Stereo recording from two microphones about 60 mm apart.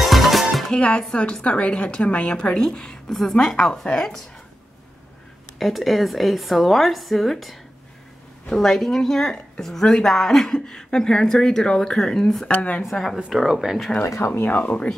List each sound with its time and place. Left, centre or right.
0.0 s music: centre
0.7 s a woman's voice: centre
5.6 s a woman's voice: centre
8.5 s a woman's voice: centre
12.4 s speech: left
12.9 s a woman's voice: centre
14.2 s speech: left
14.5 s speech: left